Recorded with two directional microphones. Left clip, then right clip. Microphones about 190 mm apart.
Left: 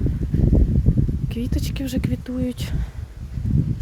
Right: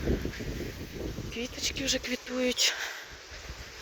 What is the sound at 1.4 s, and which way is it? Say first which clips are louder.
Speech: left 3 dB; 35° left (ahead or behind).